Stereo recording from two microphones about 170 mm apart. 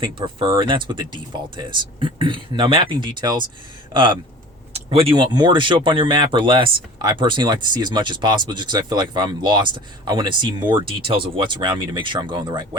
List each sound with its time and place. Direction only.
0.0 s speech: 30° right (ahead or behind)
4.9 s speech: 35° right (ahead or behind)